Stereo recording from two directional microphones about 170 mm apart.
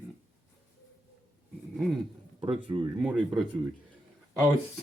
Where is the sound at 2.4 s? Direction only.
30° right (ahead or behind).